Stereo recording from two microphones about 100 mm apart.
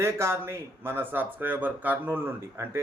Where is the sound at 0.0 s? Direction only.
25° right (ahead or behind).